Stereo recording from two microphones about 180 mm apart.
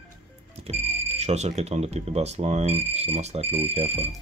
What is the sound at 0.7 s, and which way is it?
Speech, 40° right (ahead or behind).